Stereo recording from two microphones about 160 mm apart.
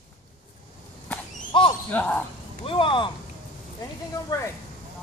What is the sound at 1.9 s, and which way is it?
Speech, 10° left (ahead or behind).